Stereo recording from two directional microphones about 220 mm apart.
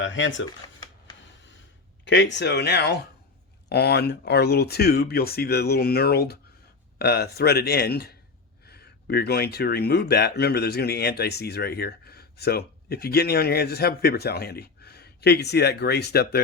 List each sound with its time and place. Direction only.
0.0 s speech: 60° left (ahead or behind)
2.0 s speech: 55° left (ahead or behind)